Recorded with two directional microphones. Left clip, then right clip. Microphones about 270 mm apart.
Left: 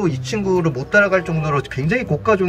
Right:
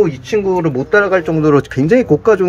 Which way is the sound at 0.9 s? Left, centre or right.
Right.